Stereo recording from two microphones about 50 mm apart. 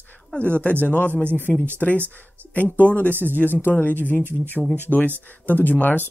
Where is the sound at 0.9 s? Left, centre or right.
Left.